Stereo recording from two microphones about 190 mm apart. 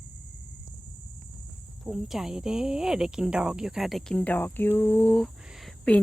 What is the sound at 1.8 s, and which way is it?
Cricket, centre (ahead or behind).